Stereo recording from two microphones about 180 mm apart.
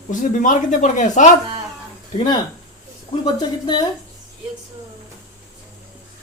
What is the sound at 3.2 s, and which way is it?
Speech, 25° left (ahead or behind).